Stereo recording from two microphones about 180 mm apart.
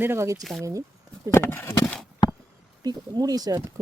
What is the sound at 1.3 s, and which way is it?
Speech, 10° left (ahead or behind).